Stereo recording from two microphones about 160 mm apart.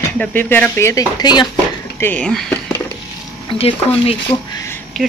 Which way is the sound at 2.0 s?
10° left (ahead or behind).